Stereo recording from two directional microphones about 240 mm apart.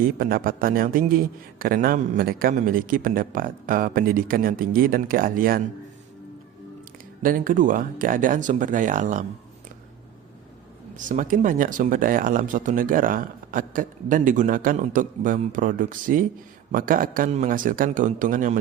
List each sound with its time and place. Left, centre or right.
0.0 s a man's voice: right
7.2 s a man's voice: right
10.9 s a man's voice: right